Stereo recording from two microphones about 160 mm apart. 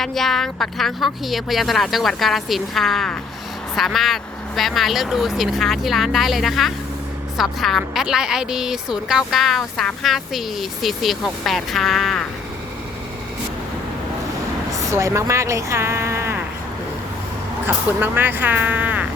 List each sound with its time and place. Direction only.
0.0 s a woman's voice: centre (ahead or behind)
14.9 s speech: 20° right (ahead or behind)
18.0 s speech: 10° right (ahead or behind)